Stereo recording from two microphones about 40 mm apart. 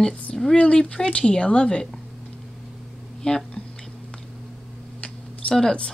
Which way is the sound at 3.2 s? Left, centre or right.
Centre.